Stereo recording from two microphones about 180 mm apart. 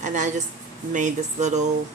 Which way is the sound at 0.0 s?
45° right (ahead or behind).